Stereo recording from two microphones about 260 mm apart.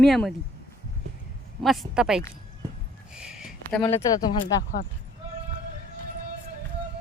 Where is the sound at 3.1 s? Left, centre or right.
Centre.